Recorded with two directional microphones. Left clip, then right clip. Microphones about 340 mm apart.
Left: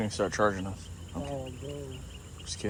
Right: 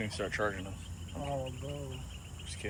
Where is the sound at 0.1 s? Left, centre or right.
Centre.